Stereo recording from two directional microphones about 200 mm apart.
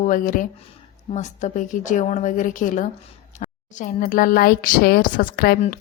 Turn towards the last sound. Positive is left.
turn(degrees=50)  # may be behind; listen again after turning